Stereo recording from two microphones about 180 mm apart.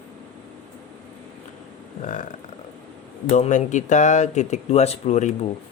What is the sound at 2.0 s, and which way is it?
Speech, 45° left (ahead or behind).